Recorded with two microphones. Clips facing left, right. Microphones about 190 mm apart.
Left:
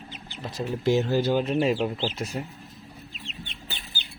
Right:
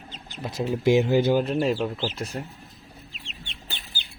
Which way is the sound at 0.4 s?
10° right (ahead or behind).